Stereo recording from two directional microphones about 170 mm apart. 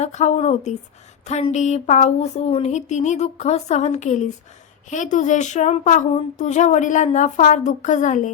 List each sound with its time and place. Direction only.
0.0 s speech: 40° left (ahead or behind)